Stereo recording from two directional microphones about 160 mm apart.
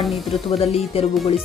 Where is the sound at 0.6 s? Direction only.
35° left (ahead or behind).